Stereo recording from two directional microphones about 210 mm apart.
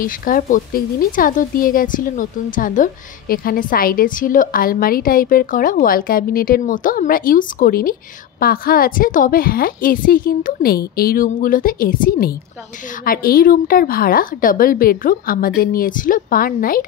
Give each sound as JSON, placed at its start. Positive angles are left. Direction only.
{"t": 0.0, "sound": "a woman's voice", "side_deg": 40}